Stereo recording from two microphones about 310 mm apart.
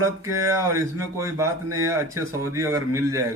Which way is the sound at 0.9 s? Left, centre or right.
Centre.